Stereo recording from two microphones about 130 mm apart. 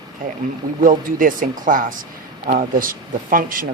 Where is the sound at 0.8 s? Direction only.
90° right.